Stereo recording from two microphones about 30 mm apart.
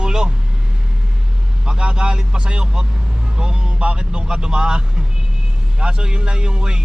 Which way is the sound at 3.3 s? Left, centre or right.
Right.